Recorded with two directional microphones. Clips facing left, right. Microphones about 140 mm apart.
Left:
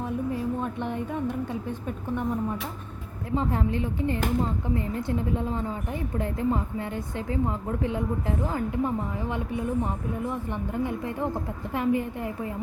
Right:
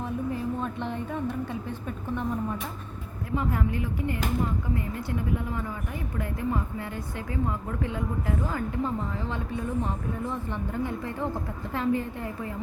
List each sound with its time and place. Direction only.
0.6 s a woman's voice: 15° left (ahead or behind)
3.3 s a woman's voice: 25° left (ahead or behind)